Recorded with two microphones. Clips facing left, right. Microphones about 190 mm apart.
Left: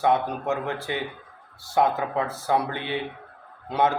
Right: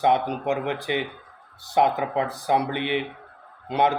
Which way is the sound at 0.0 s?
20° right (ahead or behind).